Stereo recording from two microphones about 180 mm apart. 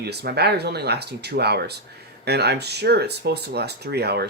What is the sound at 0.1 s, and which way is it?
Speech, 65° right (ahead or behind).